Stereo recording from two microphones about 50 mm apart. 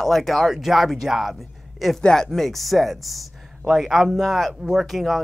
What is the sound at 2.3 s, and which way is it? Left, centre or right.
Speech, centre.